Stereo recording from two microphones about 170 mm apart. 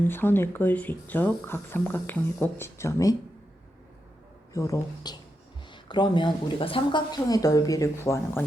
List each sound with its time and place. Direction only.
0.0 s speech: 10° left (ahead or behind)
4.5 s speech: 20° left (ahead or behind)